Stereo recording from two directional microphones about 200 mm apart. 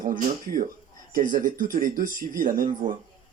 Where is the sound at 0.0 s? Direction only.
40° right (ahead or behind).